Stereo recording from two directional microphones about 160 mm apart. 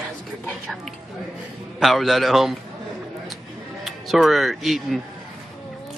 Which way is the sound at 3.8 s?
Centre (ahead or behind).